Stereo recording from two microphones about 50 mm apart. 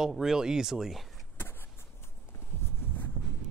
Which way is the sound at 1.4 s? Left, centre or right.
Left.